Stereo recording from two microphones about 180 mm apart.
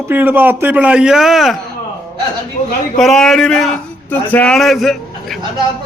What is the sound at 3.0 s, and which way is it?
A man's voice, centre (ahead or behind).